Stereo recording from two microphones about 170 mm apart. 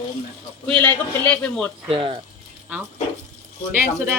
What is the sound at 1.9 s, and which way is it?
Speech, 30° right (ahead or behind).